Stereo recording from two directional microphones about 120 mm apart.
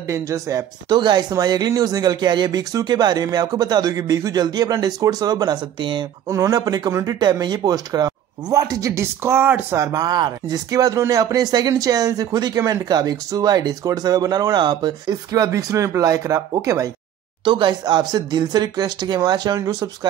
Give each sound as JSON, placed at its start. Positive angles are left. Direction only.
{"t": 0.0, "sound": "speech", "side_deg": -25}
{"t": 6.2, "sound": "speech", "side_deg": -25}
{"t": 9.9, "sound": "speech", "side_deg": -35}
{"t": 17.5, "sound": "speech", "side_deg": -40}